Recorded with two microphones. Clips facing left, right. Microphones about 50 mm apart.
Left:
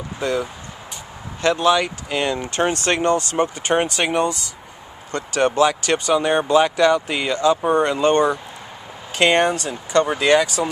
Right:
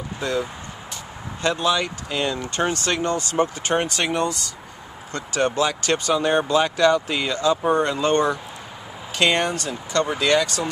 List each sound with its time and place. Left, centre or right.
0.2 s speech: centre
1.6 s speech: left
2.7 s speech: left
3.3 s speech: left